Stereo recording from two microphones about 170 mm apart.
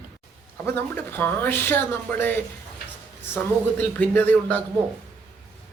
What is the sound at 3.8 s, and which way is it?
Speech, 10° left (ahead or behind).